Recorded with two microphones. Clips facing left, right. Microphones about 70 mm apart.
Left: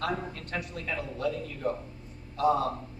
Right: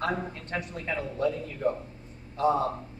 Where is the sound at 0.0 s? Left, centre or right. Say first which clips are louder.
Right 2 dB; right.